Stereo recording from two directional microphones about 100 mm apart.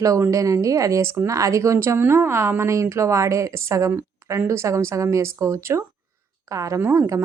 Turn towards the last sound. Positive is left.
turn(degrees=-30)  # may be behind; listen again after turning